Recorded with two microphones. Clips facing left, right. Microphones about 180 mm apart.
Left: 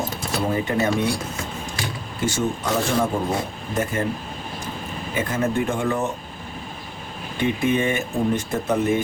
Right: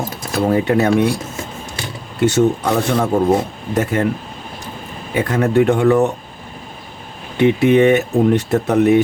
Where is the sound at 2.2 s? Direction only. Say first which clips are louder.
Right 10 dB; 65° right (ahead or behind).